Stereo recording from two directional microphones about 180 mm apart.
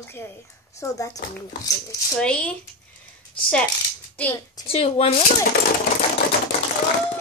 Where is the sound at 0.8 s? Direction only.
20° left (ahead or behind).